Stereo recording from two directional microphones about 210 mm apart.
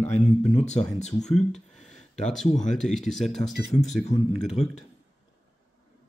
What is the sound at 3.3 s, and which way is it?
Speech, 30° left (ahead or behind).